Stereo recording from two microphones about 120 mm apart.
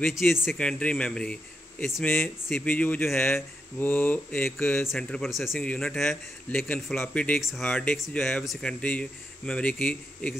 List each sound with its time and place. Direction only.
0.0 s speech: centre (ahead or behind)
3.7 s speech: 15° left (ahead or behind)